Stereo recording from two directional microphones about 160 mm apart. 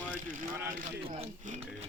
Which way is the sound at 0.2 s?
55° right (ahead or behind).